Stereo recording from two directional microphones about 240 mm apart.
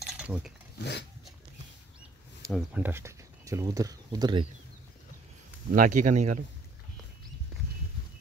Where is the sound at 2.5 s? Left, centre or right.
Centre.